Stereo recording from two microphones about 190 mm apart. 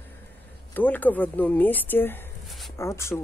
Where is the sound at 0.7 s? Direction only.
10° left (ahead or behind).